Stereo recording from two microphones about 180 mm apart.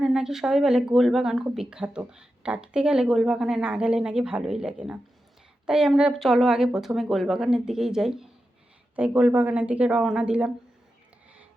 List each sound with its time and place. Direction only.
0.0 s speech: centre (ahead or behind)